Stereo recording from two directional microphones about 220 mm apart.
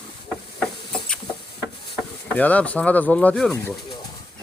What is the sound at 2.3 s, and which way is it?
Speech, 5° left (ahead or behind).